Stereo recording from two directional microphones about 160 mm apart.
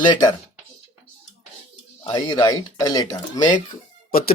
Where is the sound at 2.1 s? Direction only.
25° left (ahead or behind).